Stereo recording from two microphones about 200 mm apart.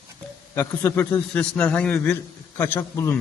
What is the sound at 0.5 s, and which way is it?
A man's voice, 10° left (ahead or behind).